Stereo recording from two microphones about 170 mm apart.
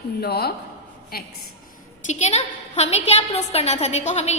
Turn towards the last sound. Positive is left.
turn(degrees=40)  # may be behind; listen again after turning